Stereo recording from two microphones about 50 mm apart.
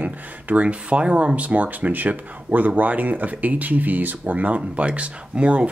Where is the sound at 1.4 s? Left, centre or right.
Right.